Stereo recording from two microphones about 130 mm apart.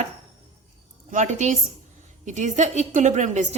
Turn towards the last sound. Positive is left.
turn(degrees=-65)  # may be behind; listen again after turning